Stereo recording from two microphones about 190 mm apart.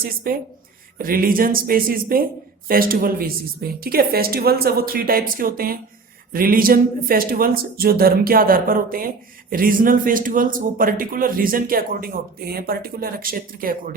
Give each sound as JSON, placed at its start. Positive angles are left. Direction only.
{"t": 0.3, "sound": "speech", "side_deg": -50}